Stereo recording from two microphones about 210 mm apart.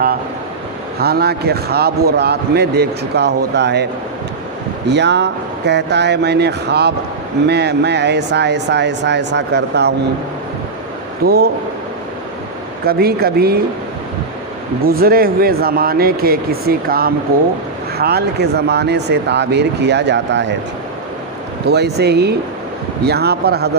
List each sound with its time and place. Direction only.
0.9 s a man's voice: 45° right (ahead or behind)
4.9 s a man's voice: 55° right (ahead or behind)
11.2 s a man's voice: 45° right (ahead or behind)
12.8 s a man's voice: 45° right (ahead or behind)
14.8 s a man's voice: 45° right (ahead or behind)
21.7 s a man's voice: 50° right (ahead or behind)